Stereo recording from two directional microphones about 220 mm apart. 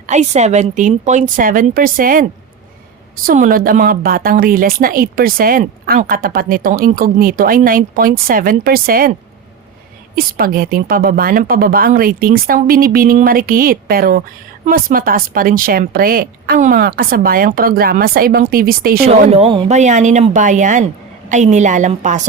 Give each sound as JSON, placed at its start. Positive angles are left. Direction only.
{"t": 0.1, "sound": "a woman's voice", "side_deg": -30}
{"t": 3.2, "sound": "a woman's voice", "side_deg": -40}
{"t": 10.2, "sound": "a woman's voice", "side_deg": -40}
{"t": 19.3, "sound": "a woman's voice", "side_deg": -25}